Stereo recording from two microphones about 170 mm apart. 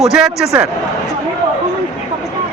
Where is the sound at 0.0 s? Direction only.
Centre (ahead or behind).